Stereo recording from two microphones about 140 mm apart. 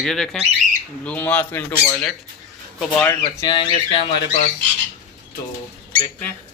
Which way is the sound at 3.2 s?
35° left (ahead or behind).